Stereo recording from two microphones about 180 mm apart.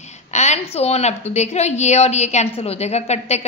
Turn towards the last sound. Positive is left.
turn(degrees=40)  # may be behind; listen again after turning